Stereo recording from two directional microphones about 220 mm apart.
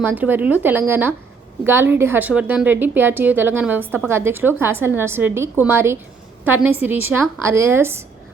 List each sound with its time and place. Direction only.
0.0 s a woman's voice: 10° right (ahead or behind)